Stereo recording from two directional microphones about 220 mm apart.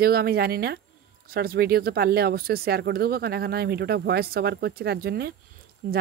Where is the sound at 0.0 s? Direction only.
45° right (ahead or behind).